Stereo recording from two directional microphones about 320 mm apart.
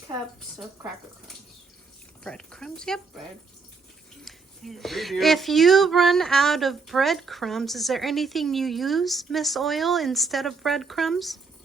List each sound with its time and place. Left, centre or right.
2.2 s speech: centre
4.2 s speech: centre